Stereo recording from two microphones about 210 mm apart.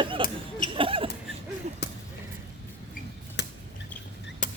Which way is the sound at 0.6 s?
25° right (ahead or behind).